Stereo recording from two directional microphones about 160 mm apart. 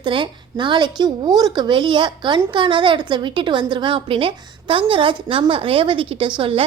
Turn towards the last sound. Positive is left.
turn(degrees=-30)  # may be behind; listen again after turning